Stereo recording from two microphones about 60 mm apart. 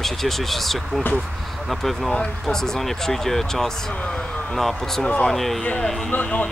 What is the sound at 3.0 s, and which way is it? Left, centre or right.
Speech, centre.